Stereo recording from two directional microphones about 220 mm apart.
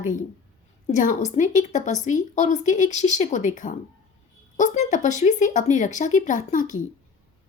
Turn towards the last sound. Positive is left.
turn(degrees=35)  # may be behind; listen again after turning